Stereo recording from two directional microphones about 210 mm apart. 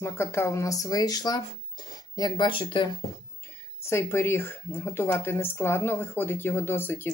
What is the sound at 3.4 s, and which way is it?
Speech, 10° left (ahead or behind).